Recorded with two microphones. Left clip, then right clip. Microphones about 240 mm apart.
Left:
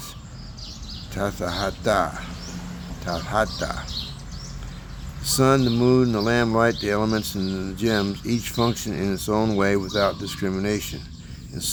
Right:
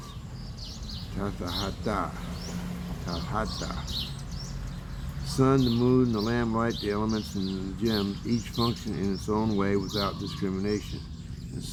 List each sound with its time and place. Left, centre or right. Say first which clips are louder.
1.1 s speech: left 8 dB; left
3.1 s speech: left 9 dB; left
5.2 s speech: left 6 dB; left